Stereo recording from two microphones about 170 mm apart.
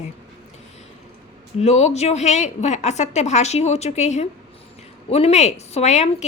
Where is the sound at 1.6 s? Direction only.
40° left (ahead or behind).